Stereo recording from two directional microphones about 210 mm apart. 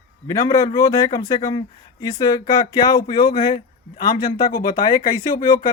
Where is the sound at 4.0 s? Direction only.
45° left (ahead or behind).